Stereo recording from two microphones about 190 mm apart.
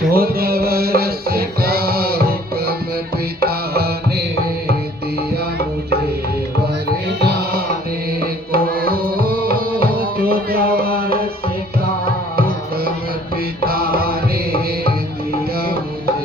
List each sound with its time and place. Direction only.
0.1 s music: 50° right (ahead or behind)
7.2 s music: 60° right (ahead or behind)
13.7 s music: 55° right (ahead or behind)